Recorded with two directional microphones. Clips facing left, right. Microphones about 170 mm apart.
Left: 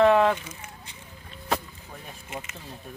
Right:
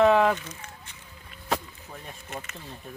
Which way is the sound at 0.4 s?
10° left (ahead or behind).